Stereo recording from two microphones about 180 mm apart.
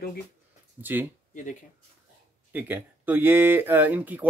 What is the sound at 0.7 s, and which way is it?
Speech, 10° right (ahead or behind).